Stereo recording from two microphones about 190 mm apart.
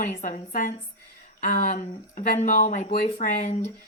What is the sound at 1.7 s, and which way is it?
A woman's voice, 40° left (ahead or behind).